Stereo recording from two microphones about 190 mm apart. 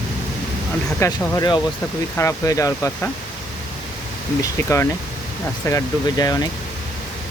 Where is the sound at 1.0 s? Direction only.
20° left (ahead or behind).